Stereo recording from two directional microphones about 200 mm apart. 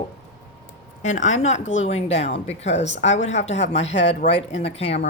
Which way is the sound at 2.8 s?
65° left (ahead or behind).